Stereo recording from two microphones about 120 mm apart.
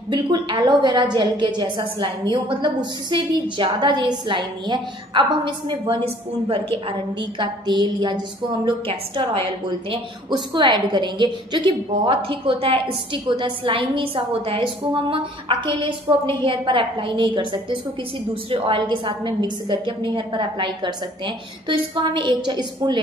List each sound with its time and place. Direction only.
0.1 s a woman's voice: 40° right (ahead or behind)